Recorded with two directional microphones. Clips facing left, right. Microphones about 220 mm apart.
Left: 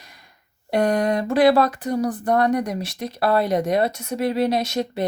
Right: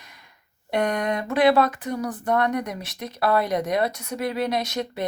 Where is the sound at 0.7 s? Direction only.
35° left (ahead or behind).